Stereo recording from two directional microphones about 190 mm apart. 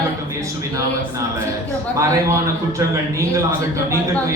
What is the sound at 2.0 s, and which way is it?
A man's voice, 15° right (ahead or behind).